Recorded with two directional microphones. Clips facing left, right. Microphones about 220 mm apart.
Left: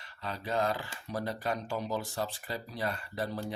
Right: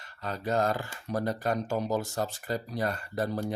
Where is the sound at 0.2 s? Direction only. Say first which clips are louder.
Right 4 dB; 45° right (ahead or behind).